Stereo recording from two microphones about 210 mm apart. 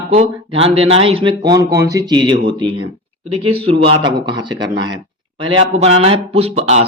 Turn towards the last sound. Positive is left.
turn(degrees=-30)  # may be behind; listen again after turning